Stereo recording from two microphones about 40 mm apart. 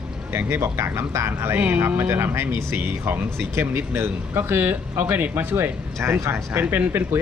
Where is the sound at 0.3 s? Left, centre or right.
Right.